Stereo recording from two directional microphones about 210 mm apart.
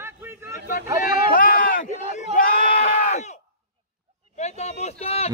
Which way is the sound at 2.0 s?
40° left (ahead or behind).